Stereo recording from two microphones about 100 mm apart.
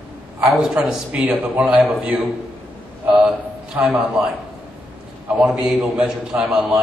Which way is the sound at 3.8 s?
20° right (ahead or behind).